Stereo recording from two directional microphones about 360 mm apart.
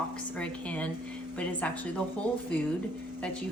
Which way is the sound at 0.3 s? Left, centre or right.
Centre.